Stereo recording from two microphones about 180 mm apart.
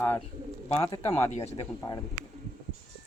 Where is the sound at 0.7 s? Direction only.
30° left (ahead or behind).